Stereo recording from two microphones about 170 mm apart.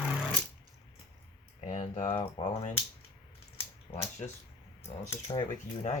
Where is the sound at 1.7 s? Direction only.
35° left (ahead or behind).